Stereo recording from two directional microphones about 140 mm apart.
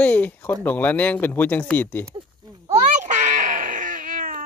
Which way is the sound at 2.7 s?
60° right (ahead or behind).